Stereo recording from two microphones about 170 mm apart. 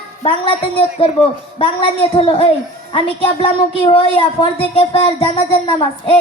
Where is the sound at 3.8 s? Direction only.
30° left (ahead or behind).